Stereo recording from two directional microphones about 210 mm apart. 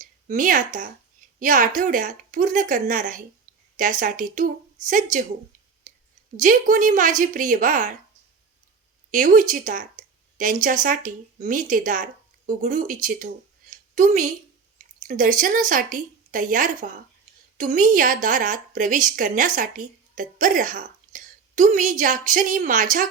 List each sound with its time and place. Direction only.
0.0 s a sound: 40° right (ahead or behind)
0.7 s a woman's voice: 40° right (ahead or behind)
6.4 s a woman's voice: 40° right (ahead or behind)
9.0 s a woman's voice: 40° right (ahead or behind)